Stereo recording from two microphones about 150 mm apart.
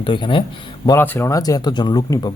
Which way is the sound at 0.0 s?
35° left (ahead or behind).